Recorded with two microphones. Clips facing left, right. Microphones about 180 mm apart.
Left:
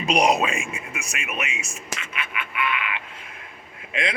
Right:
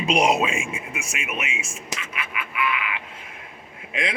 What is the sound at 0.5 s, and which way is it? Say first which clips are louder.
Speech: right 2 dB; 25° right (ahead or behind).